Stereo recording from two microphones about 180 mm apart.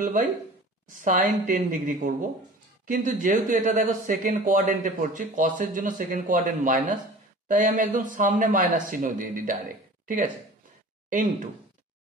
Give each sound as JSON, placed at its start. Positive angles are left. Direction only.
{"t": 0.0, "sound": "speech", "side_deg": -45}